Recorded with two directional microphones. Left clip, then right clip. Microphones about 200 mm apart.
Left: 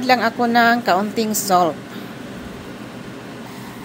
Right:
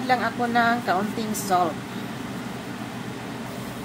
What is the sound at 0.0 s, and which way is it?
Speech, 50° left (ahead or behind).